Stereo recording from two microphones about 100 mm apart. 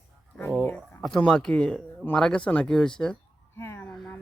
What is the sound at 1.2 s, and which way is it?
Speech, 5° left (ahead or behind).